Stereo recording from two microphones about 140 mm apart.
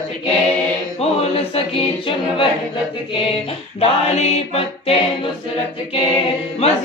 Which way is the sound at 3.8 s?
50° left (ahead or behind).